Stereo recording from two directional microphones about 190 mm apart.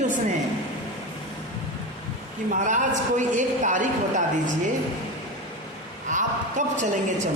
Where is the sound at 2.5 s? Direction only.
40° right (ahead or behind).